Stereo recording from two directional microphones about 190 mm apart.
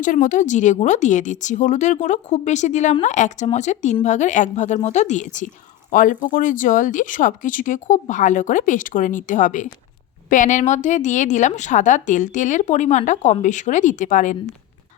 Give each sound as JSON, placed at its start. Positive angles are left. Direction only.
{"t": 0.0, "sound": "speech", "side_deg": 45}